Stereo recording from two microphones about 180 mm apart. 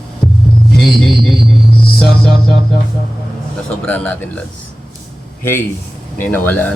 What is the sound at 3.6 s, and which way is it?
Speech, 5° left (ahead or behind).